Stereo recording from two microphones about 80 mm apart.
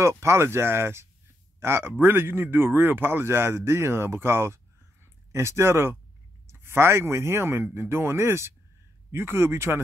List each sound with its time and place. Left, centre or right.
0.2 s speech: right